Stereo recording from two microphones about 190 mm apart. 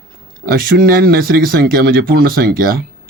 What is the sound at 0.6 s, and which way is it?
Speech, 50° right (ahead or behind).